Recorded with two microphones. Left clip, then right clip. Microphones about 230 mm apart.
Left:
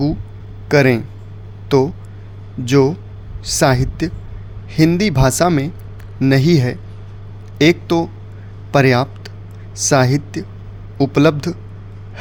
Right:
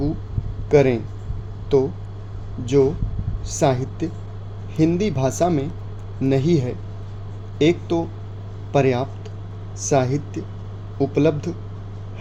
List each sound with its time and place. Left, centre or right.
0.7 s speech: left
2.6 s a man's voice: left